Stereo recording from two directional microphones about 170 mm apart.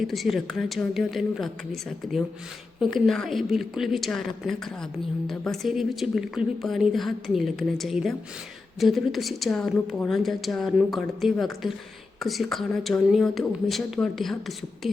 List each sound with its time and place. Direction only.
0.0 s a woman's voice: centre (ahead or behind)